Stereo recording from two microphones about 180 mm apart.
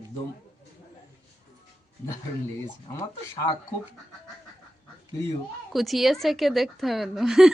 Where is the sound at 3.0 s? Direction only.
20° left (ahead or behind).